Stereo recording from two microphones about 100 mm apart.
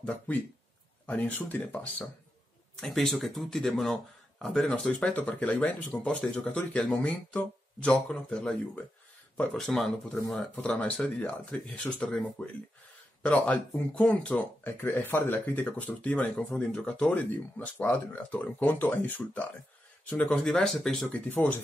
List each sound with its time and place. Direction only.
0.0 s speech: 15° left (ahead or behind)
2.8 s speech: 5° left (ahead or behind)
20.4 s speech: 5° left (ahead or behind)